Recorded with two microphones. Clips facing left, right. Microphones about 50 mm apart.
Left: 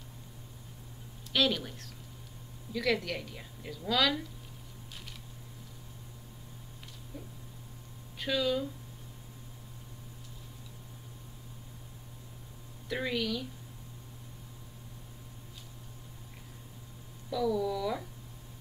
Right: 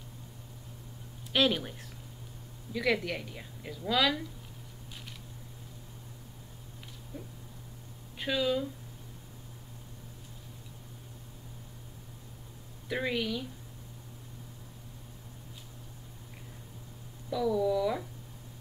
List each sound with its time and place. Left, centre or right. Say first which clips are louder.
1.3 s a woman's voice: right 2 dB; centre
8.2 s speech: right 1 dB; centre
12.8 s a woman's voice: right 1 dB; centre
17.3 s a woman's voice: right 2 dB; centre